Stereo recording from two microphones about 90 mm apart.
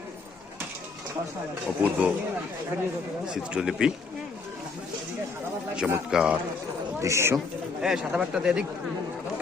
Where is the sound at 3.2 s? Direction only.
10° right (ahead or behind).